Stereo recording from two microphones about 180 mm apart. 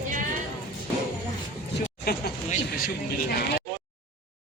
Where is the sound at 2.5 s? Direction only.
50° left (ahead or behind).